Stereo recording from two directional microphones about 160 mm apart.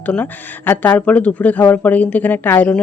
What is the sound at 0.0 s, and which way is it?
Speech, 10° left (ahead or behind).